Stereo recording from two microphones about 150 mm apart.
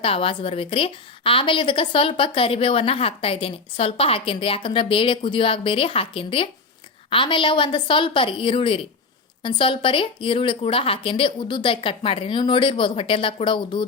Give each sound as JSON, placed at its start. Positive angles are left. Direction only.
{"t": 0.0, "sound": "a woman's voice", "side_deg": 40}